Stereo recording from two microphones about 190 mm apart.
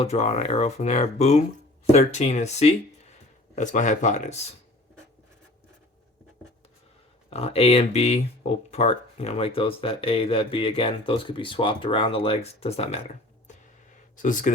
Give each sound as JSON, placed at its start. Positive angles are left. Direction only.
{"t": 0.0, "sound": "speech", "side_deg": 35}
{"t": 7.3, "sound": "speech", "side_deg": 30}
{"t": 14.2, "sound": "speech", "side_deg": 40}